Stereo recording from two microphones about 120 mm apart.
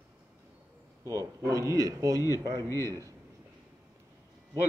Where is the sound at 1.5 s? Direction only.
30° right (ahead or behind).